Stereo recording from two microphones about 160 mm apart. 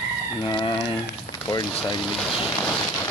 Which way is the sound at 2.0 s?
Centre (ahead or behind).